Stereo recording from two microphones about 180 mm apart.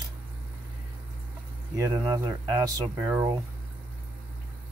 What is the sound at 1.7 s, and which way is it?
Speech, 20° right (ahead or behind).